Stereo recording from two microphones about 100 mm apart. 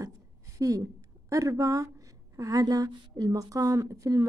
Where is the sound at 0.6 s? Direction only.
35° right (ahead or behind).